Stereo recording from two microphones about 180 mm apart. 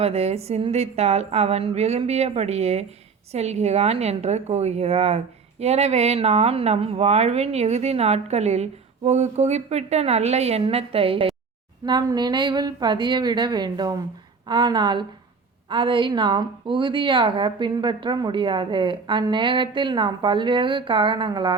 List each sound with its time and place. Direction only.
0.0 s a woman's voice: 35° right (ahead or behind)